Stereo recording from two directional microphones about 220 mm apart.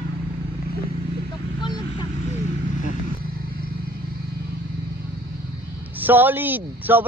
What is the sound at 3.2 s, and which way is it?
Vehicle, 40° left (ahead or behind).